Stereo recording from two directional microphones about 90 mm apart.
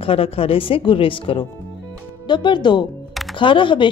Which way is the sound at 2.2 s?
60° left (ahead or behind).